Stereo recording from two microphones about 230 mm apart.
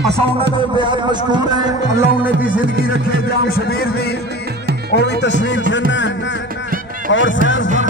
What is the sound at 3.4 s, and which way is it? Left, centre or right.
Music, left.